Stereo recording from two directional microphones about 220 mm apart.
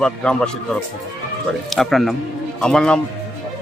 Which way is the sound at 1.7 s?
Centre (ahead or behind).